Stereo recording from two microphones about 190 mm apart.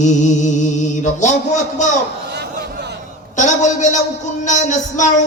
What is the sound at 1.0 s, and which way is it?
Speech, 40° left (ahead or behind).